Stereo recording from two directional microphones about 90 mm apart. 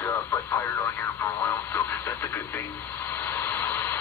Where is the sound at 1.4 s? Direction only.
25° left (ahead or behind).